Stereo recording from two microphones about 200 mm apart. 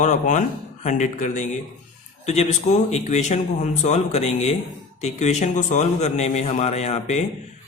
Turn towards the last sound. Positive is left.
turn(degrees=35)  # may be behind; listen again after turning